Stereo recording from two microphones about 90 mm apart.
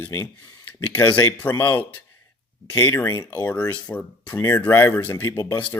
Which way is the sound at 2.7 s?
25° left (ahead or behind).